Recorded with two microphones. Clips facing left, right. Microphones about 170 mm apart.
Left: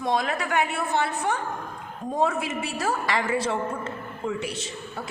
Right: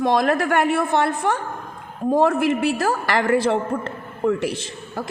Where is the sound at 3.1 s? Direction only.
65° right (ahead or behind).